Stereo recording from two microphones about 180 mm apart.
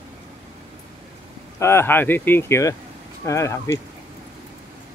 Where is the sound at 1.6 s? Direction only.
15° left (ahead or behind).